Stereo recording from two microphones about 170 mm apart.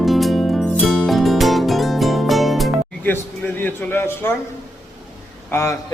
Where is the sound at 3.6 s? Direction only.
10° left (ahead or behind).